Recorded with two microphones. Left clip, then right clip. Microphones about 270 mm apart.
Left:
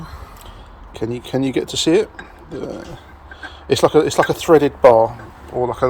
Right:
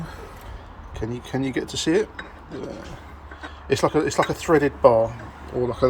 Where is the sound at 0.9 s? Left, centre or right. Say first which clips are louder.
Left 7 dB; left.